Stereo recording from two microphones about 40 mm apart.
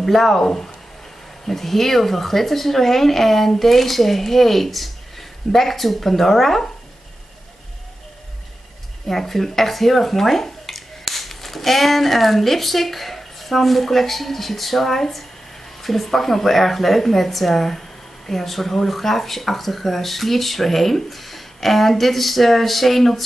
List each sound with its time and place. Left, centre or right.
0.0 s a woman's voice: centre
0.4 s a woman's voice: centre
9.0 s a woman's voice: centre